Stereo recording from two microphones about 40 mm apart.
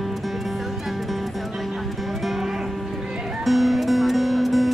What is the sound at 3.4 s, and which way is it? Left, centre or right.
Music, centre.